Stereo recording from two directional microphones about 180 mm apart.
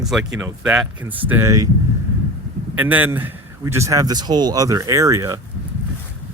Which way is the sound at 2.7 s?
10° right (ahead or behind).